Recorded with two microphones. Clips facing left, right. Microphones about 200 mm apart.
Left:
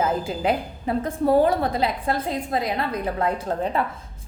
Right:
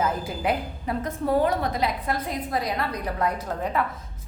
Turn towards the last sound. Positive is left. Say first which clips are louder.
# left 3 dB
turn(degrees=30)  # may be behind; listen again after turning